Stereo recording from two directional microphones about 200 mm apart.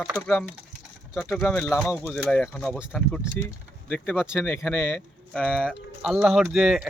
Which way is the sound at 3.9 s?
10° left (ahead or behind).